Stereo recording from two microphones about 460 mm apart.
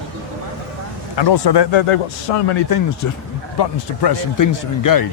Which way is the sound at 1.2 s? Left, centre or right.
Left.